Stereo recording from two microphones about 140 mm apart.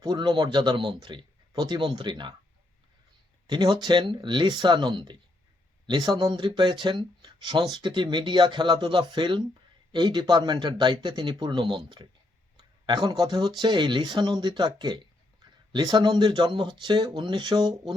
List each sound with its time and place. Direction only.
0.0 s speech: 30° right (ahead or behind)
3.4 s speech: 30° right (ahead or behind)